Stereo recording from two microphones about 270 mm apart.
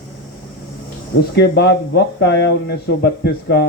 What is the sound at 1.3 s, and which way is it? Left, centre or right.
A man's voice, left.